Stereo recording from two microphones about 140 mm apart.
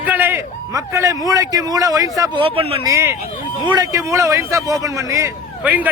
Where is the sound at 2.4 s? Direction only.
40° right (ahead or behind).